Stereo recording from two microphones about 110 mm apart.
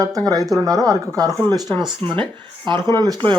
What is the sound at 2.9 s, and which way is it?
Speech, 35° right (ahead or behind).